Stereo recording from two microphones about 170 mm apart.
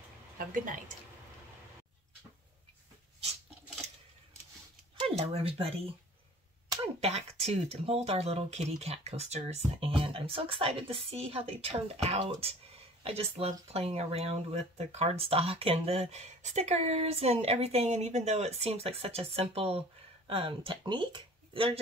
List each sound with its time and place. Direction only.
0.4 s speech: 55° right (ahead or behind)
5.0 s speech: 35° right (ahead or behind)
7.0 s a woman's voice: 40° right (ahead or behind)